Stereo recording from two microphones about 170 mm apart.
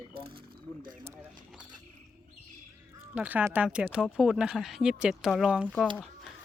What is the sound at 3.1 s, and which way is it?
Speech, 10° right (ahead or behind).